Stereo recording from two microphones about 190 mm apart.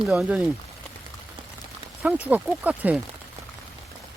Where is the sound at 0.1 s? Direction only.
5° right (ahead or behind).